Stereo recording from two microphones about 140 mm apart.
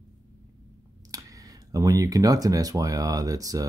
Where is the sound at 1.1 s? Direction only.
25° right (ahead or behind).